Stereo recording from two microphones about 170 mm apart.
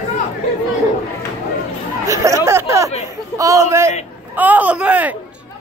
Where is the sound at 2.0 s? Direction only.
20° right (ahead or behind).